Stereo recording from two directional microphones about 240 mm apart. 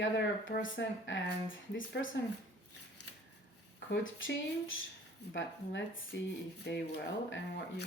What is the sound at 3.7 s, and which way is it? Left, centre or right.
Speech, left.